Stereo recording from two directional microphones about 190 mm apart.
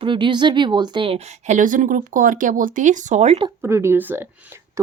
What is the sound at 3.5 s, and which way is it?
Speech, 15° right (ahead or behind).